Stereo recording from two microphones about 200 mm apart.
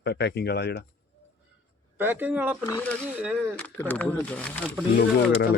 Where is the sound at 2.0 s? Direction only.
10° right (ahead or behind).